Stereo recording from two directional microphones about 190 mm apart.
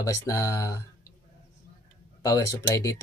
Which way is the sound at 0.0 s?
15° left (ahead or behind).